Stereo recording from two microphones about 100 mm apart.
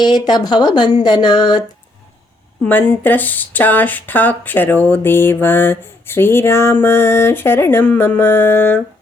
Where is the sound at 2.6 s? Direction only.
15° left (ahead or behind).